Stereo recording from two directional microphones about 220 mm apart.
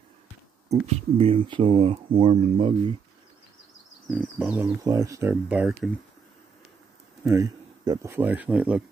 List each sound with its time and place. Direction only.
0.7 s speech: 30° right (ahead or behind)
4.2 s speech: 5° right (ahead or behind)
7.2 s speech: 15° right (ahead or behind)